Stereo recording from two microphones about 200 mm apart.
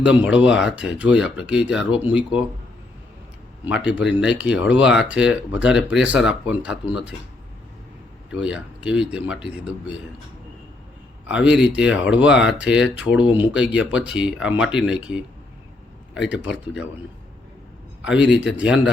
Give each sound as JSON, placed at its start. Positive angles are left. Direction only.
{"t": 0.0, "sound": "speech", "side_deg": -5}
{"t": 3.7, "sound": "speech", "side_deg": -5}
{"t": 8.3, "sound": "speech", "side_deg": -5}
{"t": 11.3, "sound": "speech", "side_deg": -5}
{"t": 13.2, "sound": "speech", "side_deg": 25}
{"t": 13.5, "sound": "speech", "side_deg": -5}
{"t": 16.1, "sound": "speech", "side_deg": -5}
{"t": 18.0, "sound": "speech", "side_deg": -5}